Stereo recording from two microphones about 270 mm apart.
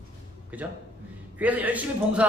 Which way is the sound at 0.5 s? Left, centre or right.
Centre.